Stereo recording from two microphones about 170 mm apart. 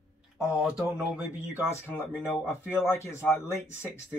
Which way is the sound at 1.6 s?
15° left (ahead or behind).